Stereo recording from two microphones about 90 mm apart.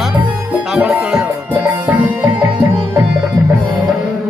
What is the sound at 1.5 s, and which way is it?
Music, 20° right (ahead or behind).